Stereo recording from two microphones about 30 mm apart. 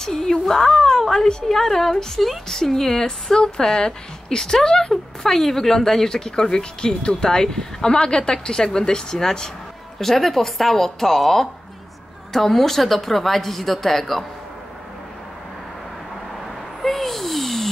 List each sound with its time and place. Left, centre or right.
0.0 s a woman's voice: left
3.5 s a woman's voice: left
9.9 s a woman's voice: centre
16.4 s a sound: centre